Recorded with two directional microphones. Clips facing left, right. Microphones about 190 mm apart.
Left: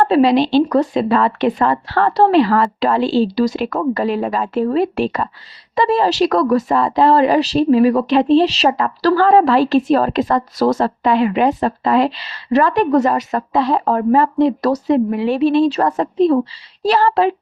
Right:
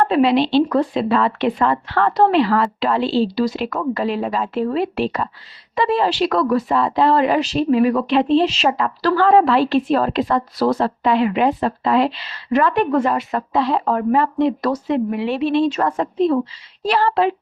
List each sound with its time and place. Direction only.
0.0 s a woman's voice: 40° left (ahead or behind)